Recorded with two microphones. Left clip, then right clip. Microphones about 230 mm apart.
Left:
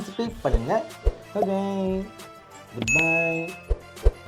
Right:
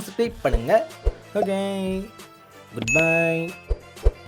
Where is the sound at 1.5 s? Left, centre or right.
Right.